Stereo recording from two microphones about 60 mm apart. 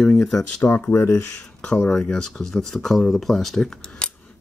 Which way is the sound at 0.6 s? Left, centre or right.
Left.